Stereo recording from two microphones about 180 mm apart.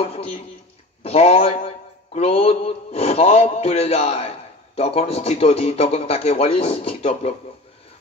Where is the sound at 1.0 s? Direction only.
35° left (ahead or behind).